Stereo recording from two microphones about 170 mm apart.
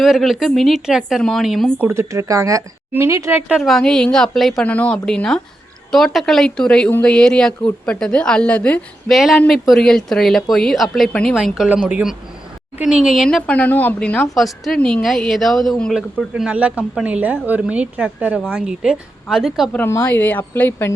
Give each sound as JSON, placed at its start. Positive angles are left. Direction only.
{"t": 0.0, "sound": "speech", "side_deg": 0}
{"t": 1.8, "sound": "a woman's voice", "side_deg": -15}
{"t": 3.6, "sound": "speech", "side_deg": 0}
{"t": 19.7, "sound": "a woman's voice", "side_deg": 15}